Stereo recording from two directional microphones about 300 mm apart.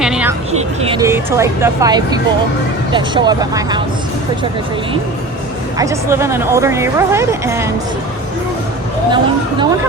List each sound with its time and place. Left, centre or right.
0.0 s music: centre
0.5 s a woman's voice: centre
5.7 s a woman's voice: centre
9.0 s a woman's voice: centre